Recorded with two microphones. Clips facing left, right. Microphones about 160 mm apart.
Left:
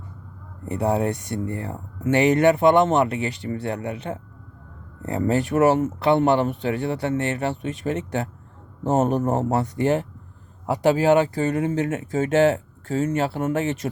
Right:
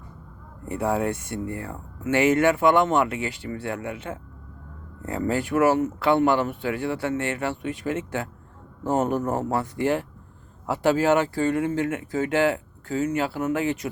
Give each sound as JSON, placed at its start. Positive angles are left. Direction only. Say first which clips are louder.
{"t": 0.6, "sound": "speech", "louder": "left 2 dB", "side_deg": 30}
{"t": 5.0, "sound": "speech", "louder": "left 3 dB", "side_deg": 25}
{"t": 8.8, "sound": "speech", "louder": "left 3 dB", "side_deg": 25}